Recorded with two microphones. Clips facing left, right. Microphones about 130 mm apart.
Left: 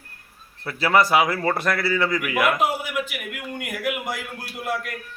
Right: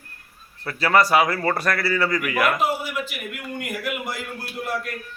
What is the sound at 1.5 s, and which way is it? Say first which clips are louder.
Speech: even; 20° left (ahead or behind).